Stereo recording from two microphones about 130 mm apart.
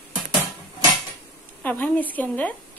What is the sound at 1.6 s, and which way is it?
Dishes, 10° left (ahead or behind).